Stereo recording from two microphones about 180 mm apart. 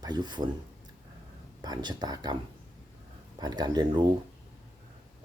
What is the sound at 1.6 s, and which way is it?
Speech, 25° right (ahead or behind).